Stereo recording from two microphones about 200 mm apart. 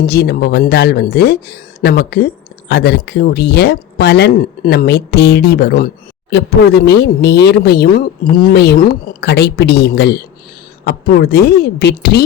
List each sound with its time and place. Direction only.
0.0 s a woman's voice: 50° left (ahead or behind)